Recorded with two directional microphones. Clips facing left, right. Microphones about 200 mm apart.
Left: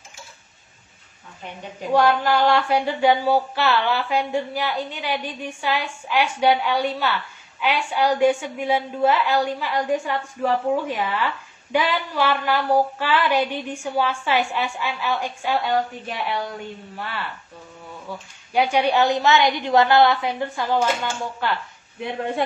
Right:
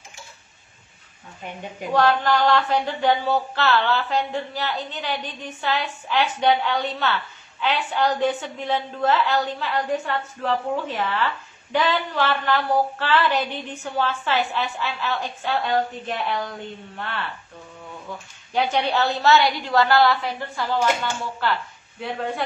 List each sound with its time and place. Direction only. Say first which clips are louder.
1.9 s a woman's voice: left 1 dB; 10° left (ahead or behind)
16.9 s a woman's voice: right 1 dB; 5° left (ahead or behind)
18.5 s a woman's voice: left 3 dB; 10° left (ahead or behind)